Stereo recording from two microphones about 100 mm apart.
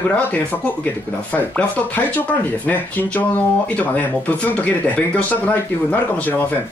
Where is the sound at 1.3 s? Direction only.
15° left (ahead or behind).